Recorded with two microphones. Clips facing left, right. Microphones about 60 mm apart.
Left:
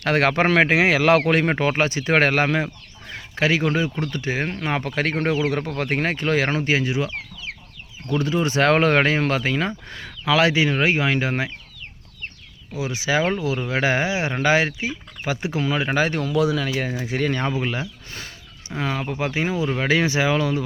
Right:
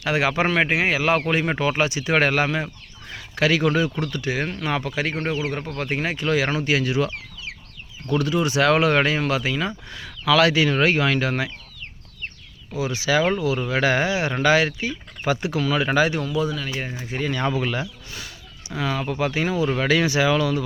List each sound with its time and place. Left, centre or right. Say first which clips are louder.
0.0 s a man's voice: left 2 dB; left
1.5 s speech: left 1 dB; left
3.3 s speech: right 1 dB; left
5.5 s speech: left 3 dB; left
6.6 s speech: even; left
8.2 s speech: left 1 dB; left
10.3 s speech: right 1 dB; left
12.8 s speech: right 1 dB; left
16.0 s speech: right 2 dB; left
16.2 s speech: left 4 dB; left
17.4 s speech: right 1 dB; centre